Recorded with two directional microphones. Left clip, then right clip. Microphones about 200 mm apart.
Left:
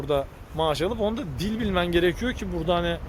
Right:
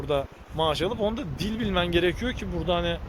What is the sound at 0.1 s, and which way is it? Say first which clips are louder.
Speech: left 2 dB; 10° left (ahead or behind).